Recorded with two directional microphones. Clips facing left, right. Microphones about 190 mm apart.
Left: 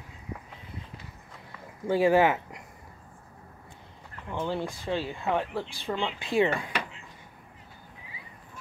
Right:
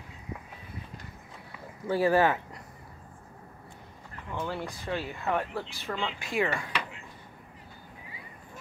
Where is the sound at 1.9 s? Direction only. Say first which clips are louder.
Left 2 dB; 15° left (ahead or behind).